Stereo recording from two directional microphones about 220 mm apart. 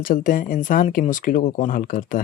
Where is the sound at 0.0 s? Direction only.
40° left (ahead or behind).